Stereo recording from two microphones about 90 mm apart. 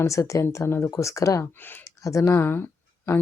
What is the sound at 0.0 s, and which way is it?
Speech, 35° left (ahead or behind).